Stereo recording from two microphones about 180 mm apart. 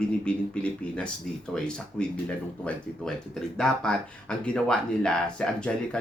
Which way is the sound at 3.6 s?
5° left (ahead or behind).